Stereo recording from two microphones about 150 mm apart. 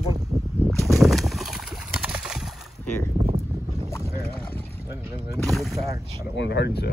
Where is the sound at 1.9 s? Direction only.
5° right (ahead or behind).